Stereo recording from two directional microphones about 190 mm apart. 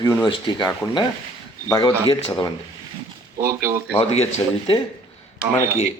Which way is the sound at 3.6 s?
15° right (ahead or behind).